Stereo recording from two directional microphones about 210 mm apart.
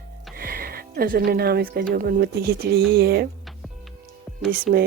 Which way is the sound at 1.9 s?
45° right (ahead or behind).